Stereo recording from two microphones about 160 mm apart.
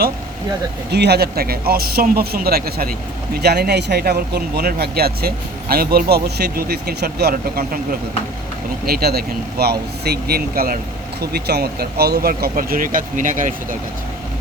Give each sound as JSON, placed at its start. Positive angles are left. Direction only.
{"t": 0.9, "sound": "speech", "side_deg": -90}
{"t": 3.4, "sound": "speech", "side_deg": -90}
{"t": 8.9, "sound": "speech", "side_deg": -75}
{"t": 11.2, "sound": "speech", "side_deg": -80}